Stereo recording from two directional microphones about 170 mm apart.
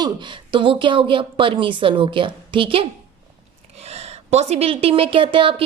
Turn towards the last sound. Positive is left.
turn(degrees=-30)  # may be behind; listen again after turning